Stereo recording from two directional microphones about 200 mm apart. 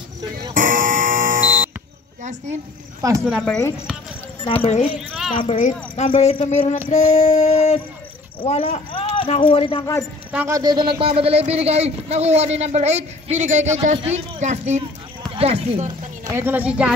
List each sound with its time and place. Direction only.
0.6 s buzzer: 40° right (ahead or behind)
3.3 s speech: 5° left (ahead or behind)
4.6 s a sound: 30° left (ahead or behind)
8.4 s speech: 25° left (ahead or behind)
10.3 s speech: 15° right (ahead or behind); by 15.9 s 30° right (ahead or behind)
16.3 s a woman's voice: 10° right (ahead or behind)